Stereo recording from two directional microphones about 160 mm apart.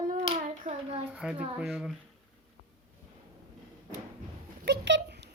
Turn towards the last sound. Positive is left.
turn(degrees=-90)